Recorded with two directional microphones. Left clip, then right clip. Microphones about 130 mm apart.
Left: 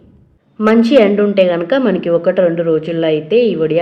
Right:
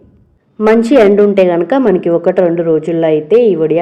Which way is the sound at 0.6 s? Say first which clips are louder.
Right 2 dB; 45° right (ahead or behind).